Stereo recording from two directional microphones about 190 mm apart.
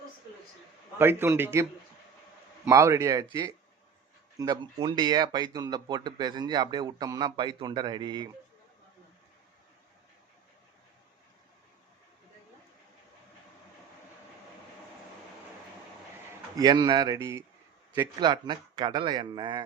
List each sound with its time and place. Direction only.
0.9 s speech: 10° right (ahead or behind)
2.6 s speech: 15° right (ahead or behind)
16.6 s speech: 20° right (ahead or behind)